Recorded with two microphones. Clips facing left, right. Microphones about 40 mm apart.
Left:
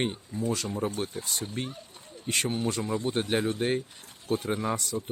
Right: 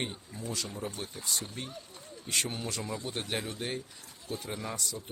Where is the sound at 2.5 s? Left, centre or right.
Centre.